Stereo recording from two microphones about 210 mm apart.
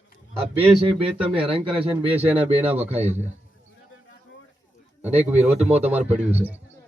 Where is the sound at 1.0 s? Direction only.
25° right (ahead or behind).